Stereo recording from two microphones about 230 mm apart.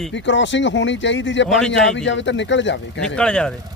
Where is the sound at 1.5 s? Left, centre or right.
Centre.